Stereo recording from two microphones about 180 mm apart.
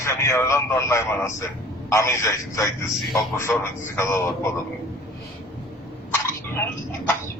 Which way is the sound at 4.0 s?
15° left (ahead or behind).